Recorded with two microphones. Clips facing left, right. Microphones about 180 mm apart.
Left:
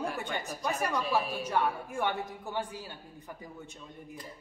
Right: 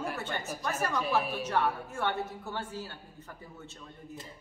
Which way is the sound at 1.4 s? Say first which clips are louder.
Even; 10° left (ahead or behind).